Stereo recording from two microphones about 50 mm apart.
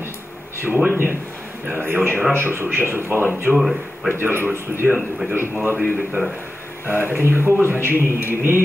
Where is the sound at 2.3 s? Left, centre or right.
Right.